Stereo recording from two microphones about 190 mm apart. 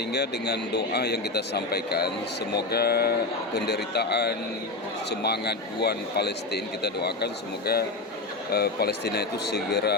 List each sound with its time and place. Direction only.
0.1 s a man's voice: 60° left (ahead or behind)